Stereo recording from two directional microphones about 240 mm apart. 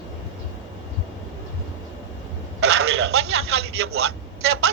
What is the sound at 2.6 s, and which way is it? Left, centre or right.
Speech, right.